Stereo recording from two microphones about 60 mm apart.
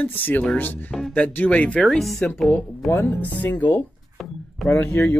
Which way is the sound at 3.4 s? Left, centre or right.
Left.